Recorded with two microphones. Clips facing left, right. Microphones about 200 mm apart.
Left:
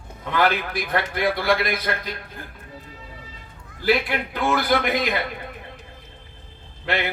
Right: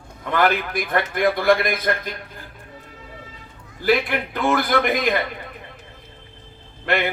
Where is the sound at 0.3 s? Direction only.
50° right (ahead or behind).